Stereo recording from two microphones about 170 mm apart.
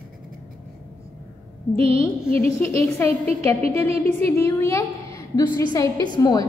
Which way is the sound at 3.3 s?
40° right (ahead or behind).